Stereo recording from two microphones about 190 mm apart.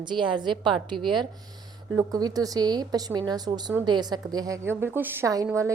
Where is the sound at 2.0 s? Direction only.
20° right (ahead or behind).